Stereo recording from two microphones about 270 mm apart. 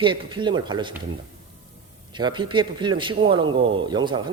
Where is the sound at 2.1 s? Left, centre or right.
Centre.